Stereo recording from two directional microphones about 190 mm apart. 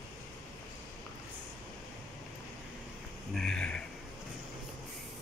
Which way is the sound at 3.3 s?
5° left (ahead or behind).